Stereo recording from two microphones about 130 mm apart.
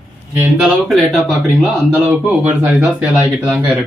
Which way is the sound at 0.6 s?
Centre (ahead or behind).